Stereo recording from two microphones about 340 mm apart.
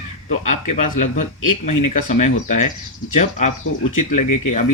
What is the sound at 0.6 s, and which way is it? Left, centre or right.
Speech, left.